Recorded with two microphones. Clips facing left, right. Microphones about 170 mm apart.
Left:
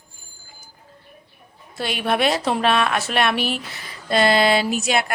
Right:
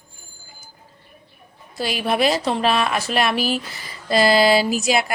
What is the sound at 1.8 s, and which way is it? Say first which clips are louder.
Speech: right 1 dB; centre (ahead or behind).